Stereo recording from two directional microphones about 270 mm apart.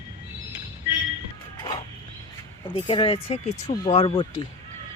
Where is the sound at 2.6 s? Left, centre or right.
Centre.